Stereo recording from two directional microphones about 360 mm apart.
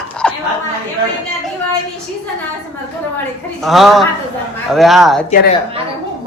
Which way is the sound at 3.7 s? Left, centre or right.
Centre.